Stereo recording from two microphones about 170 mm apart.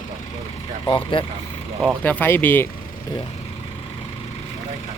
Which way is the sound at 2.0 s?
10° left (ahead or behind).